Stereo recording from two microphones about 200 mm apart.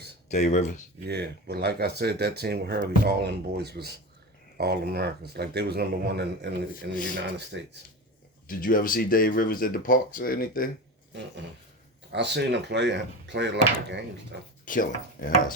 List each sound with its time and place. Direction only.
0.3 s speech: 35° left (ahead or behind)
1.0 s speech: 55° right (ahead or behind)
8.4 s speech: 45° left (ahead or behind)
12.1 s speech: 60° right (ahead or behind)
14.6 s speech: 45° left (ahead or behind)